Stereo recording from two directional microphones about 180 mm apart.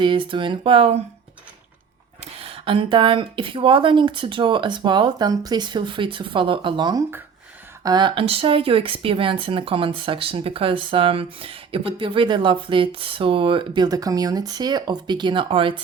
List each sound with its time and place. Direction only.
0.0 s speech: 25° right (ahead or behind)
2.2 s speech: 30° right (ahead or behind)